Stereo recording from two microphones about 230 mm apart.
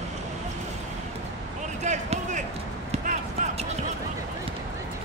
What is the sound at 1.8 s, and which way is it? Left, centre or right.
Basketball bounce, right.